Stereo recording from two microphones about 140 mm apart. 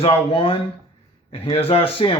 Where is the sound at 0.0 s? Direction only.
40° left (ahead or behind).